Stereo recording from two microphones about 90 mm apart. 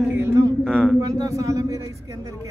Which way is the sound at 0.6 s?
5° left (ahead or behind).